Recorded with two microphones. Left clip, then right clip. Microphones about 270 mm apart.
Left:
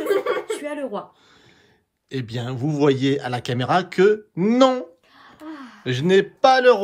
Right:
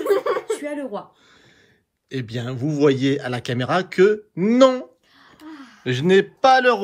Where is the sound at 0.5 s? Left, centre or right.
Centre.